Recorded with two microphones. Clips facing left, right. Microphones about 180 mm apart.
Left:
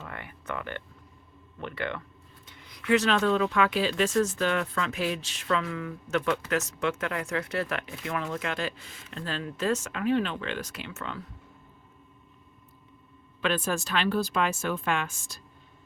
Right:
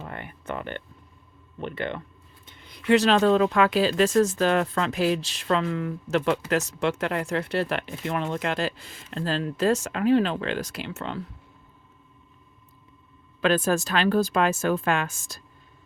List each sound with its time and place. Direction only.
0.0 s a sound: 25° right (ahead or behind)
1.5 s speech: 25° right (ahead or behind)
13.4 s a woman's voice: 40° right (ahead or behind)